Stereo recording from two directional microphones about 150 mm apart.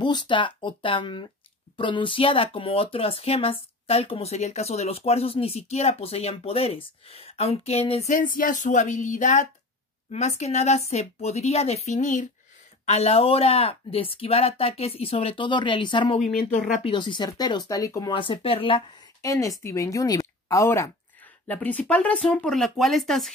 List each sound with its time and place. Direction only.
0.0 s speech: 30° left (ahead or behind)
8.1 s a woman's voice: 65° left (ahead or behind)
12.8 s speech: 45° left (ahead or behind)
16.4 s speech: 60° left (ahead or behind)
16.8 s speech: 30° left (ahead or behind)
18.1 s speech: 35° left (ahead or behind)
19.2 s speech: 20° left (ahead or behind); by 23.3 s centre (ahead or behind)